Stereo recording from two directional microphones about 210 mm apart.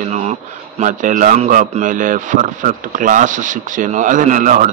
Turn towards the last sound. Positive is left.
turn(degrees=-40)  # may be behind; listen again after turning